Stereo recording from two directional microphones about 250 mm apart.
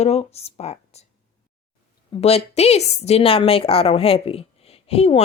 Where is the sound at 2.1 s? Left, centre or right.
Left.